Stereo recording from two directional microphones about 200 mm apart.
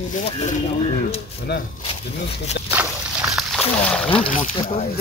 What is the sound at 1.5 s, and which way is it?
Speech, 55° left (ahead or behind).